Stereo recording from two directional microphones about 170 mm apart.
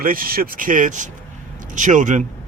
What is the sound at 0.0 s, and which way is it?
Speech, 60° right (ahead or behind).